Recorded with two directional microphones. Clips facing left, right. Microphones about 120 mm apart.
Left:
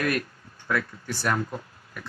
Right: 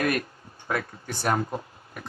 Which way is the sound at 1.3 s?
25° right (ahead or behind).